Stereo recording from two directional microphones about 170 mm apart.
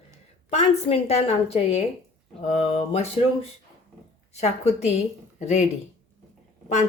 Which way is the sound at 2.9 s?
40° left (ahead or behind).